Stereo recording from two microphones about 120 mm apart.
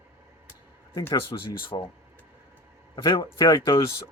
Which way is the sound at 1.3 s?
40° left (ahead or behind).